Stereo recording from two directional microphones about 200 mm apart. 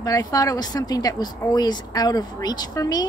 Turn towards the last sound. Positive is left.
turn(degrees=20)  # may be behind; listen again after turning